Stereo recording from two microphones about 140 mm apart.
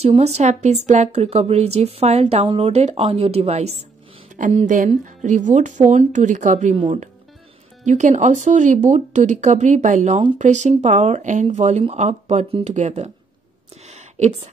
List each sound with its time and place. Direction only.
0.0 s speech: 50° right (ahead or behind)
4.6 s speech: 65° right (ahead or behind)
7.8 s speech: 60° right (ahead or behind)
13.8 s a sound: 55° right (ahead or behind)